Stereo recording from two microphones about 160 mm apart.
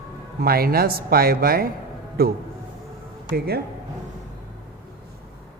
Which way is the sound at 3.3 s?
85° right.